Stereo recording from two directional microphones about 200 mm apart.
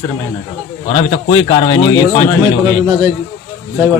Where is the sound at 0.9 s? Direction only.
25° left (ahead or behind).